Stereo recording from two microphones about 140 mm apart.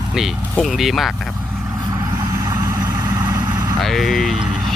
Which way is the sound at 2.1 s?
20° right (ahead or behind).